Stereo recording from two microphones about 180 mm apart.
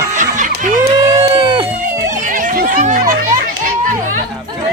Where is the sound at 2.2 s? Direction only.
50° right (ahead or behind).